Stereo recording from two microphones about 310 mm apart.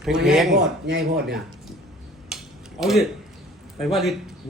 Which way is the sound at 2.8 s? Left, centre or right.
Centre.